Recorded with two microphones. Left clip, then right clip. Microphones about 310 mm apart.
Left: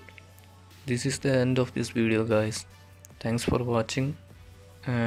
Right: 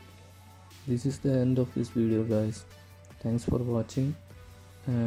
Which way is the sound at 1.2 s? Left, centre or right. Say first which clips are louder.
Left 3 dB; left.